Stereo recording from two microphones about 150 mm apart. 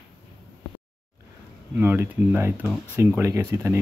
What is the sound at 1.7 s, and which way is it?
Speech, 15° right (ahead or behind).